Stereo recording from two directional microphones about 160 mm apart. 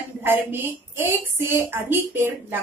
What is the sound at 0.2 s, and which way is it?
A woman's voice, 15° right (ahead or behind).